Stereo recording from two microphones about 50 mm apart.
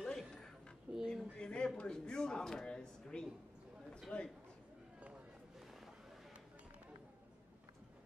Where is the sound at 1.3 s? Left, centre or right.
Centre.